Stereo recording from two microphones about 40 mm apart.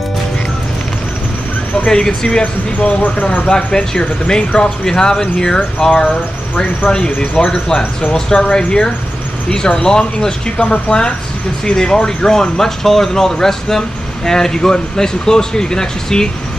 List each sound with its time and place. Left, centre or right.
1.9 s speech: centre
2.4 s speech: left
3.4 s speech: centre
6.0 s speech: left
7.4 s speech: centre